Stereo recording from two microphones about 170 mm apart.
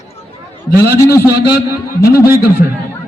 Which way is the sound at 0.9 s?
15° left (ahead or behind).